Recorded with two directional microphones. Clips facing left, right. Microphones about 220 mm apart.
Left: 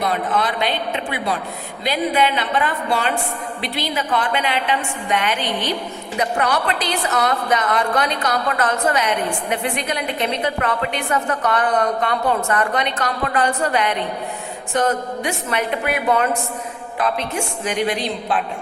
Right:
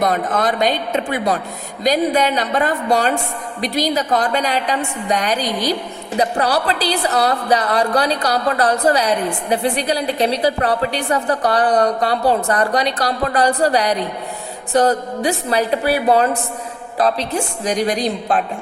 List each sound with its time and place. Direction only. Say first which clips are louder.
0.0 s a woman's voice: right 3 dB; 45° right (ahead or behind)